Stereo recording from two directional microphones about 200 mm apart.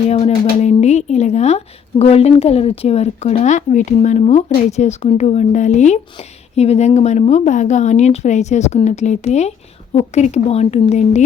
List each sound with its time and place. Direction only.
0.1 s speech: 35° left (ahead or behind)